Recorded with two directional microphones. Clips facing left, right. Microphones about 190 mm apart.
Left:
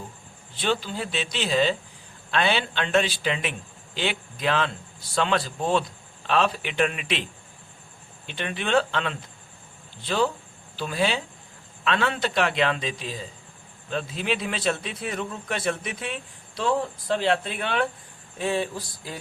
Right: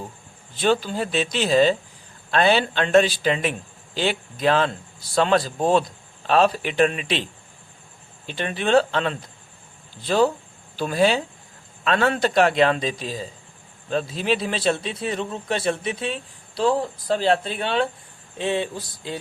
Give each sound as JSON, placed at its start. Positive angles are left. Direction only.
{"t": 0.5, "sound": "a man's voice", "side_deg": -45}
{"t": 8.3, "sound": "a man's voice", "side_deg": -35}